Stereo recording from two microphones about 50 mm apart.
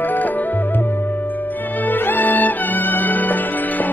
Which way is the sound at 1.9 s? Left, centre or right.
Left.